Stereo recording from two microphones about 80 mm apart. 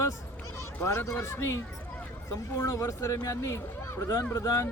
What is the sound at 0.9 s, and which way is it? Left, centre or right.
Speech, left.